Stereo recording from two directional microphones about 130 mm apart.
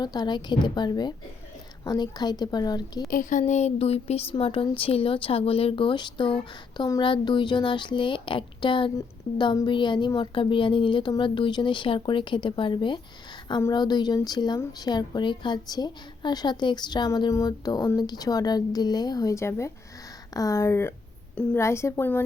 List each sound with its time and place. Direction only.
0.0 s a woman's voice: 30° left (ahead or behind)
3.1 s a woman's voice: 85° left; by 22.2 s 20° left (ahead or behind)